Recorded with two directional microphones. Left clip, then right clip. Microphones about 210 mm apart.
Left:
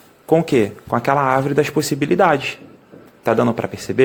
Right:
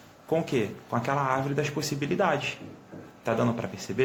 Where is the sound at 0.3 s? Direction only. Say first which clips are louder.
Left 12 dB; 40° left (ahead or behind).